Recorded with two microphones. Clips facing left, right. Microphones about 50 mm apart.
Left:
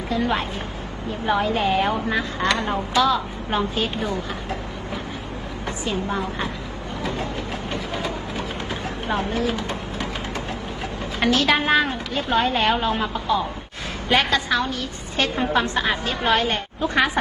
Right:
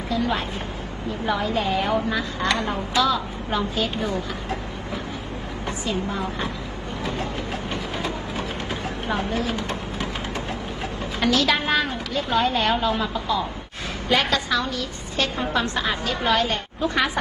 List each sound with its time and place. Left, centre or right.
0.1 s a woman's voice: left
5.6 s a woman's voice: left
9.3 s a woman's voice: left
11.2 s a woman's voice: left